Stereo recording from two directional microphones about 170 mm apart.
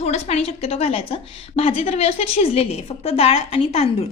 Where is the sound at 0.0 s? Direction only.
40° left (ahead or behind).